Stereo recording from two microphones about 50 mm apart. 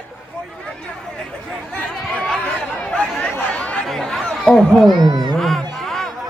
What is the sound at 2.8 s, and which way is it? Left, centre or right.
Chatter, left.